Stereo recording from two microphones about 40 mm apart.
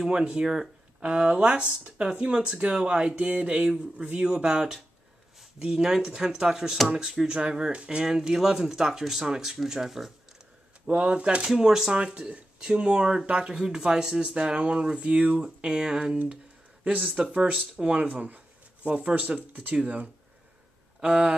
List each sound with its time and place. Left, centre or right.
0.0 s speech: centre
5.8 s speech: centre
11.1 s speech: right; by 11.9 s centre
11.9 s speech: right
16.8 s speech: right
17.4 s speech: right
18.9 s speech: right